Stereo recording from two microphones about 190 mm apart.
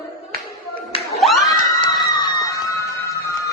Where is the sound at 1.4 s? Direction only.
15° left (ahead or behind).